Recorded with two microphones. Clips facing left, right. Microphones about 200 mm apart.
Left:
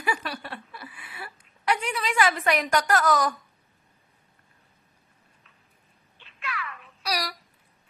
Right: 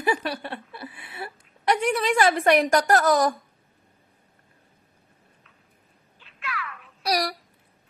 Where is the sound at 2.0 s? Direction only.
40° right (ahead or behind).